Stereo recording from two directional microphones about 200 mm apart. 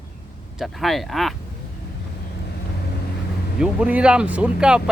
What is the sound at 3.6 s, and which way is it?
Speech, 5° right (ahead or behind).